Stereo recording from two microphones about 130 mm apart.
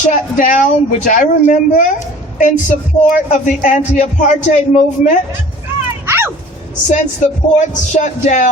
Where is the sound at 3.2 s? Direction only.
75° left (ahead or behind).